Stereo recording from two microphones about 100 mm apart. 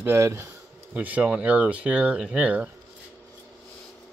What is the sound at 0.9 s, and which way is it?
Speech, 15° right (ahead or behind).